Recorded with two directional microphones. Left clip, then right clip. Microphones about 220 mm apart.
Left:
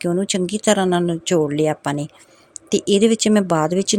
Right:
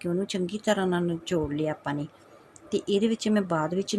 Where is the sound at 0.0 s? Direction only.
40° left (ahead or behind).